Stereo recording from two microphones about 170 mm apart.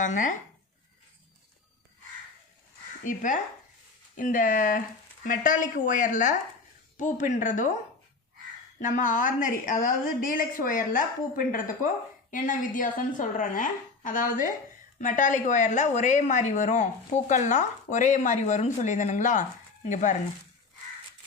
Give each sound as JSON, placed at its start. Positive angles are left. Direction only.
{"t": 0.0, "sound": "speech", "side_deg": 50}
{"t": 3.0, "sound": "speech", "side_deg": 50}
{"t": 8.8, "sound": "speech", "side_deg": 50}